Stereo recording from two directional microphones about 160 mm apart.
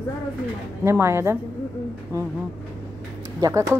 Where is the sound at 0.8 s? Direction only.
15° right (ahead or behind).